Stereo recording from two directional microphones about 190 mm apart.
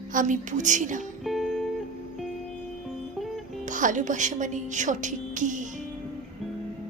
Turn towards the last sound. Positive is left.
turn(degrees=-40)  # may be behind; listen again after turning